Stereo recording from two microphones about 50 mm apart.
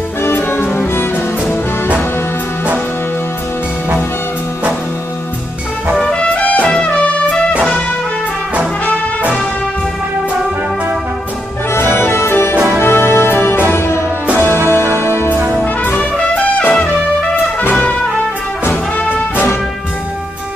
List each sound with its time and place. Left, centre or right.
0.2 s music: left
6.0 s music: left
11.7 s music: left
13.7 s music: left
15.6 s brass instrument: left
16.5 s music: left